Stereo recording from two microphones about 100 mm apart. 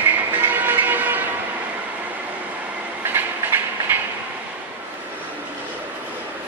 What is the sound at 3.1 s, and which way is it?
Train, 20° right (ahead or behind).